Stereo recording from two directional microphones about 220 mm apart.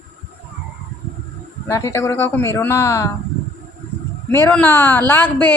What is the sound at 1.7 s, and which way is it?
Speech, 15° left (ahead or behind).